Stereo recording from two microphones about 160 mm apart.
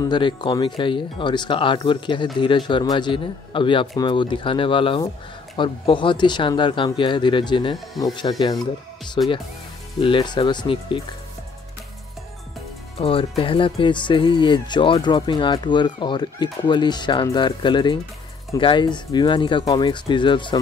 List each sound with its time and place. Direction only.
0.1 s a man's voice: 30° left (ahead or behind)
12.9 s speech: 35° left (ahead or behind)